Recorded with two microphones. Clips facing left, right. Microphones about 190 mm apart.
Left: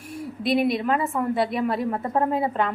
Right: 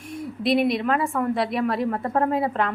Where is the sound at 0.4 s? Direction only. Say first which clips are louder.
Right 1 dB; centre (ahead or behind).